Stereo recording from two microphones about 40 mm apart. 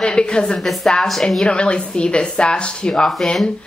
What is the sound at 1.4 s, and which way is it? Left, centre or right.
A woman's voice, left.